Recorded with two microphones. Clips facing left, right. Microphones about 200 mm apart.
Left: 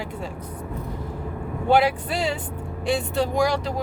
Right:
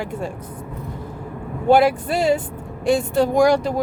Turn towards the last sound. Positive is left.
turn(degrees=-50)  # may be behind; listen again after turning